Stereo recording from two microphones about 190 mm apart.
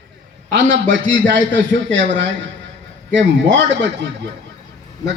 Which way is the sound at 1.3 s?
70° right (ahead or behind).